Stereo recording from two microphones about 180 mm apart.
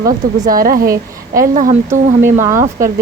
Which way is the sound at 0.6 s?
55° right (ahead or behind).